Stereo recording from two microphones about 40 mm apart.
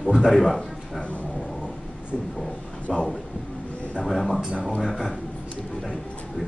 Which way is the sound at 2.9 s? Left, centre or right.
Centre.